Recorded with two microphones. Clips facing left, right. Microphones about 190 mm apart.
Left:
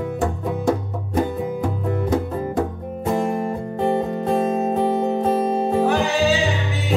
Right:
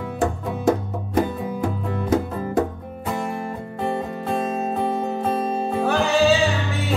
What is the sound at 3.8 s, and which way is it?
Music, 20° left (ahead or behind).